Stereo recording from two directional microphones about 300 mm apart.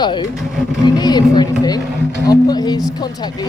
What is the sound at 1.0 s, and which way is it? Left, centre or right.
Speech, centre.